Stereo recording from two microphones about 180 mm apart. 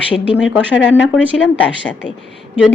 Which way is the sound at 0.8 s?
85° left.